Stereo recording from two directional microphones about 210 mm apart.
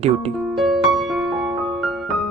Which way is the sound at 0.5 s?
Centre (ahead or behind).